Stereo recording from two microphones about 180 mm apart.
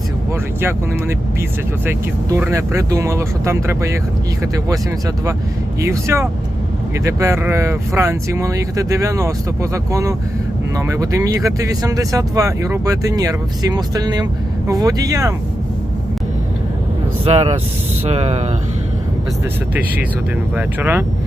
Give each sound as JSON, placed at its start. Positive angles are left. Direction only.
{"t": 1.9, "sound": "speech", "side_deg": -15}
{"t": 5.8, "sound": "speech", "side_deg": -15}
{"t": 17.2, "sound": "speech", "side_deg": -35}
{"t": 20.6, "sound": "speech", "side_deg": -10}